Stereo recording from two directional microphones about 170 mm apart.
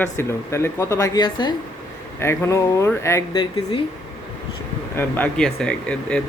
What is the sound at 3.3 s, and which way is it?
Speech, 30° left (ahead or behind).